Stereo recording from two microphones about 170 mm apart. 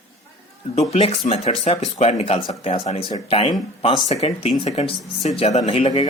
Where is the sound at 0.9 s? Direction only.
40° left (ahead or behind).